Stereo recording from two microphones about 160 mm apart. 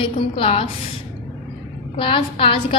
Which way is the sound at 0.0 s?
35° left (ahead or behind).